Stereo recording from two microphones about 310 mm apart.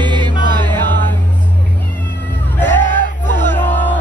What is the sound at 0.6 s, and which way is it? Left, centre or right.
Music, centre.